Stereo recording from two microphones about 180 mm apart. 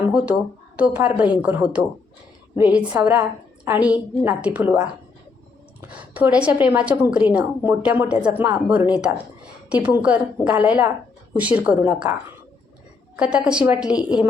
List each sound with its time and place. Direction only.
0.1 s a sound: 5° right (ahead or behind)
0.8 s a woman's voice: 10° right (ahead or behind)
5.9 s a woman's voice: 10° right (ahead or behind)
13.1 s a woman's voice: 5° right (ahead or behind)